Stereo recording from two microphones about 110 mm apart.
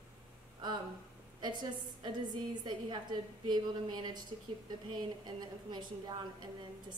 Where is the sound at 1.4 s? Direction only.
45° right (ahead or behind).